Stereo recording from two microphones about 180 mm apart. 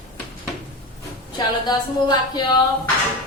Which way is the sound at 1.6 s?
25° left (ahead or behind).